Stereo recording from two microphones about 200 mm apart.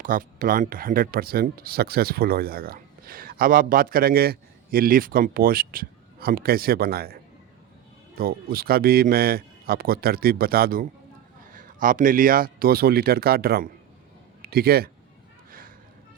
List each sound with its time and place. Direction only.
0.0 s a man's voice: 45° right (ahead or behind)